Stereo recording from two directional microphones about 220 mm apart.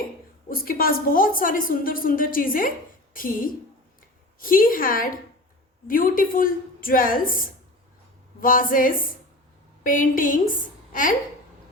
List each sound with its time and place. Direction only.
0.5 s a woman's voice: 40° left (ahead or behind)
8.4 s a woman's voice: 40° left (ahead or behind)